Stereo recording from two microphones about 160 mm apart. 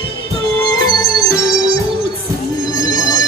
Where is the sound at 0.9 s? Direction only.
25° left (ahead or behind).